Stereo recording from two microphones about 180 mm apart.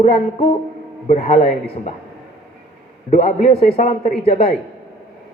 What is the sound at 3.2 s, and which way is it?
A man's voice, 35° left (ahead or behind).